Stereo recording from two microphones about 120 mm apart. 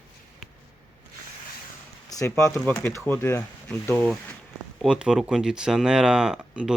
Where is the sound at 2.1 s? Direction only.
30° left (ahead or behind).